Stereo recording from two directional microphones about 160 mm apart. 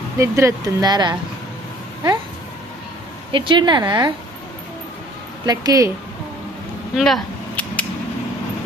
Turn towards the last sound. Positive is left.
turn(degrees=5)  # may be behind; listen again after turning